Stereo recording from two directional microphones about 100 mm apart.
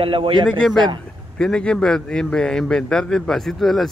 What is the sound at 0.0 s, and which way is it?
Speech, 65° right (ahead or behind).